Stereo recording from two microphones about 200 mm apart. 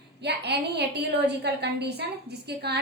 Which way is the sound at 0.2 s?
55° right (ahead or behind).